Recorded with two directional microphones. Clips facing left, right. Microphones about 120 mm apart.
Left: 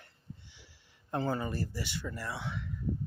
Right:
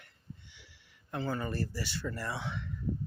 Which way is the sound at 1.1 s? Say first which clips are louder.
Left 3 dB; 30° left (ahead or behind).